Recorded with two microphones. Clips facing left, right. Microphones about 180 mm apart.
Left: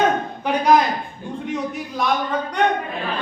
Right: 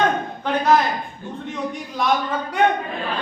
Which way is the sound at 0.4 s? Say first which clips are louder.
Left 1 dB; 10° left (ahead or behind).